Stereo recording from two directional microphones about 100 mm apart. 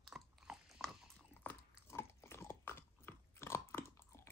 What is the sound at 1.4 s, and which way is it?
Biting, 20° left (ahead or behind).